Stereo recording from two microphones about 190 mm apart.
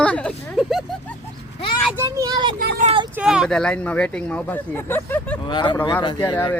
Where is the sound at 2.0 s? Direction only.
20° right (ahead or behind).